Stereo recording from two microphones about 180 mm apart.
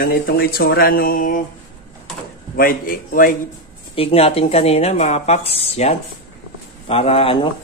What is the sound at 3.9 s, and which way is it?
Speech, 35° left (ahead or behind).